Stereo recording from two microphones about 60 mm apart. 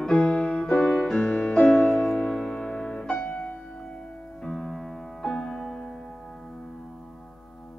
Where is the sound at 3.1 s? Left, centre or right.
Left.